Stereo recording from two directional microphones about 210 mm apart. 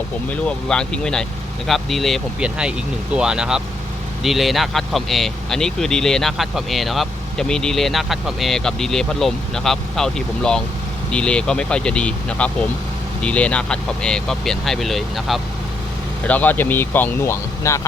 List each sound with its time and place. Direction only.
0.3 s speech: 5° left (ahead or behind)